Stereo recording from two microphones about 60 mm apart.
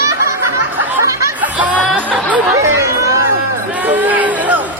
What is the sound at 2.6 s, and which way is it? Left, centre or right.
Chatter, right.